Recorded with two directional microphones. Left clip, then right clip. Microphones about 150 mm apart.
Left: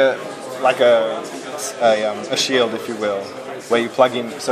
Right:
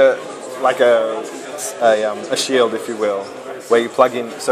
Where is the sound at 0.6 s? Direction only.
35° right (ahead or behind).